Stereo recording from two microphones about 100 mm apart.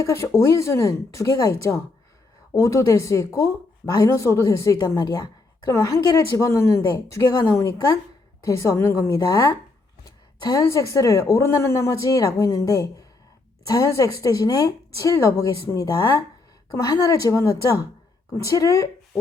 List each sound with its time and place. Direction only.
0.0 s a woman's voice: 30° left (ahead or behind)
10.7 s a woman's voice: 30° left (ahead or behind)